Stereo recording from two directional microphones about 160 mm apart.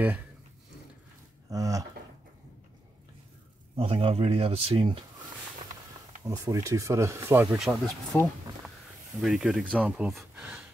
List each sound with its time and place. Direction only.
1.5 s speech: 20° right (ahead or behind)
3.7 s speech: 35° right (ahead or behind)
6.2 s speech: 20° right (ahead or behind)
7.5 s speech: centre (ahead or behind)
9.2 s speech: 5° right (ahead or behind)